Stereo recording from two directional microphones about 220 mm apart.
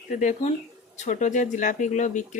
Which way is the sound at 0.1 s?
35° left (ahead or behind).